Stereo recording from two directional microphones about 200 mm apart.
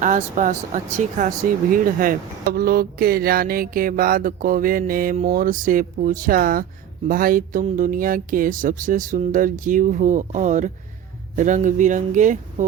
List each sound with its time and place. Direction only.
0.0 s speech: 40° right (ahead or behind)